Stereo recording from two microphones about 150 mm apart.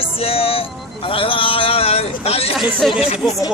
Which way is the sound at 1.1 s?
35° left (ahead or behind).